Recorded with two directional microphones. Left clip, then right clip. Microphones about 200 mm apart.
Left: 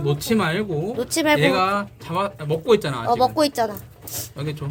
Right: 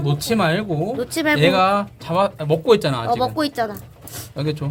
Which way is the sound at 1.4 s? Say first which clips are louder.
Right 3 dB; 50° right (ahead or behind).